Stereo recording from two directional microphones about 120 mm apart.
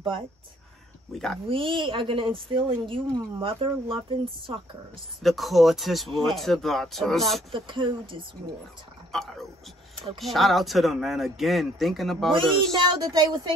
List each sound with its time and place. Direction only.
1.1 s speech: 5° left (ahead or behind)
1.5 s a woman's voice: 45° right (ahead or behind)
5.2 s speech: centre (ahead or behind)
7.5 s a woman's voice: 45° right (ahead or behind)
9.1 s speech: centre (ahead or behind)
12.7 s speech: 35° right (ahead or behind)